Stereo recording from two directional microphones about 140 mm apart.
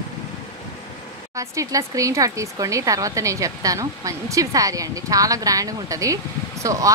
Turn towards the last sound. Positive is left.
turn(degrees=-25)  # may be behind; listen again after turning